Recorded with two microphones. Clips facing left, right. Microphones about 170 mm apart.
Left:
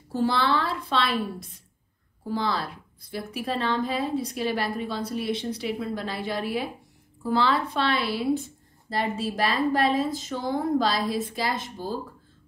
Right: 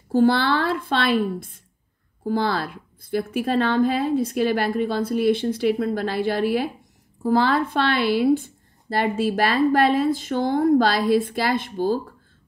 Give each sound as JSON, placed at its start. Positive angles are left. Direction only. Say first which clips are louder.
{"t": 0.2, "sound": "a woman's voice", "louder": "right 5 dB", "side_deg": -65}
{"t": 2.2, "sound": "a woman's voice", "louder": "right 5 dB", "side_deg": -60}
{"t": 7.2, "sound": "speech", "louder": "right 4 dB", "side_deg": -40}
{"t": 7.5, "sound": "a woman's voice", "louder": "right 4 dB", "side_deg": -60}